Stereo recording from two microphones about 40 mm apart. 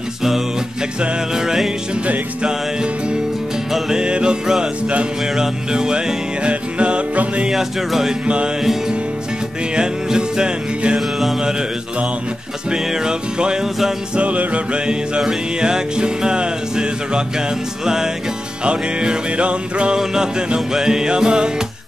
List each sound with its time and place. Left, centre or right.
1.3 s music: centre
5.7 s music: centre
7.4 s music: centre
9.8 s music: centre
11.0 s music: centre
12.7 s music: centre
14.1 s music: right